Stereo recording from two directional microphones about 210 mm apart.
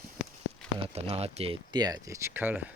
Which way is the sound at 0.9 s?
30° right (ahead or behind).